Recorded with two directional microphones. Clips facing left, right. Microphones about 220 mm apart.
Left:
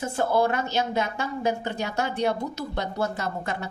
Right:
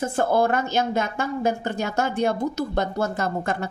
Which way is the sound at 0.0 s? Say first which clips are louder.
Right 2 dB; 50° right (ahead or behind).